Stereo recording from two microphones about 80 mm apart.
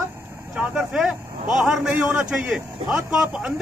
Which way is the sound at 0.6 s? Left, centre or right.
Centre.